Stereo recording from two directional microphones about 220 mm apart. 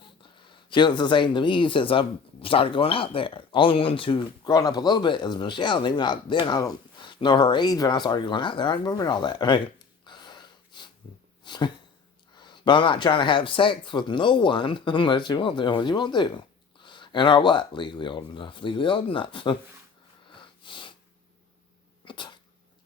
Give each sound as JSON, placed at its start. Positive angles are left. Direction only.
{"t": 0.0, "sound": "speech", "side_deg": 20}
{"t": 20.4, "sound": "sniff", "side_deg": 20}
{"t": 22.0, "sound": "cat", "side_deg": 20}